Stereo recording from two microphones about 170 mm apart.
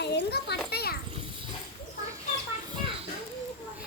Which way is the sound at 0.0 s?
80° left.